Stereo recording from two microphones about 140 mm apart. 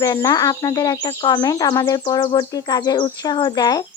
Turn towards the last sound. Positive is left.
turn(degrees=30)  # may be behind; listen again after turning